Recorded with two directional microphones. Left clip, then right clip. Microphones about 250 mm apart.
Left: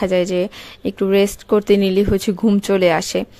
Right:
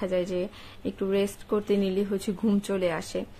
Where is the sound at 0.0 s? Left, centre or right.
Left.